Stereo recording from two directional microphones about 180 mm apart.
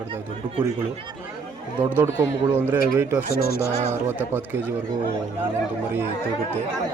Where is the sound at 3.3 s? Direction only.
60° left (ahead or behind).